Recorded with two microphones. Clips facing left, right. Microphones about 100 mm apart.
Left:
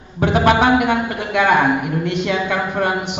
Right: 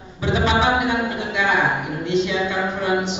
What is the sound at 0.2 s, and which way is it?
A man's voice, 55° left (ahead or behind).